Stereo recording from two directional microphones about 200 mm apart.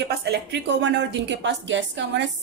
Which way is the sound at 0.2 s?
60° right (ahead or behind).